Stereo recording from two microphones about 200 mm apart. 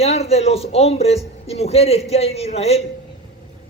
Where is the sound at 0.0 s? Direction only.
30° left (ahead or behind).